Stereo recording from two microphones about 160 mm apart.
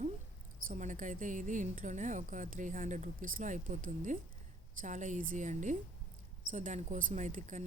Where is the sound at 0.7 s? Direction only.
55° right (ahead or behind).